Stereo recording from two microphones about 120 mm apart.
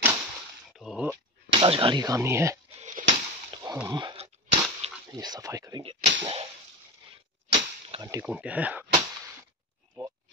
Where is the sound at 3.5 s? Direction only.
35° right (ahead or behind).